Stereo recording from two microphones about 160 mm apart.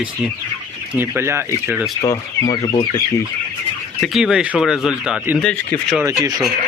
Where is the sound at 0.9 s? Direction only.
15° right (ahead or behind).